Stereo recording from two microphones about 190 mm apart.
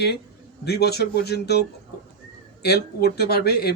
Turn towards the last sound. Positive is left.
turn(degrees=55)  # may be behind; listen again after turning